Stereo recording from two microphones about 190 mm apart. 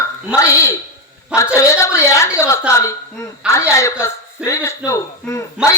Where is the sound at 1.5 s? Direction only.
15° left (ahead or behind).